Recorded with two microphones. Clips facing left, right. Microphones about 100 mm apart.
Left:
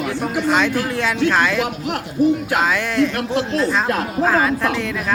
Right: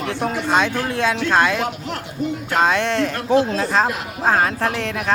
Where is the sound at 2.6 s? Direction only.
25° right (ahead or behind).